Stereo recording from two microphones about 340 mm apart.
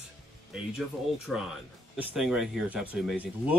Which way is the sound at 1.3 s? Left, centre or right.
Centre.